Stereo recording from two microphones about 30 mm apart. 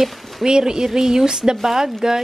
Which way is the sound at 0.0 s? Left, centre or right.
Centre.